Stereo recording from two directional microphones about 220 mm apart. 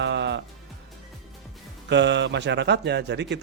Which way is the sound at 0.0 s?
50° right (ahead or behind).